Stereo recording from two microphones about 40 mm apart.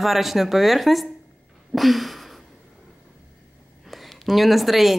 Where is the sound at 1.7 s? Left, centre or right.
Centre.